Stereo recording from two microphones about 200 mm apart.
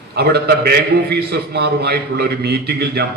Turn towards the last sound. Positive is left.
turn(degrees=-55)  # may be behind; listen again after turning